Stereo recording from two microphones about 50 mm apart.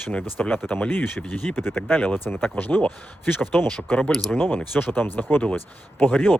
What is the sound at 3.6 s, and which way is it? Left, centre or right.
Speech, left.